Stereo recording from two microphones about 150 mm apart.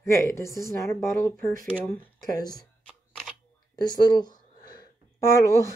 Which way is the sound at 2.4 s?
25° left (ahead or behind).